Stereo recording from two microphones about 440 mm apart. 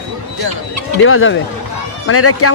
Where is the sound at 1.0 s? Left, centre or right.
Left.